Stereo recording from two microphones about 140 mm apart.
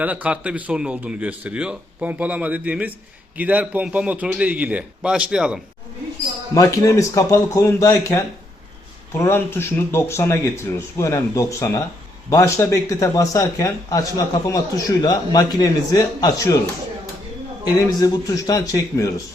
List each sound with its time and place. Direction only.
0.0 s a man's voice: 10° right (ahead or behind)
6.5 s a man's voice: 25° left (ahead or behind)
17.8 s a man's voice: 25° left (ahead or behind)